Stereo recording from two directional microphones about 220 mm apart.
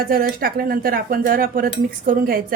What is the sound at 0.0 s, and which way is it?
A woman's voice, 40° right (ahead or behind).